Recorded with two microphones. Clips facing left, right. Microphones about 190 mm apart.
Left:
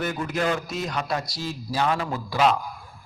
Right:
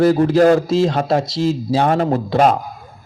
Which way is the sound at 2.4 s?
50° right (ahead or behind).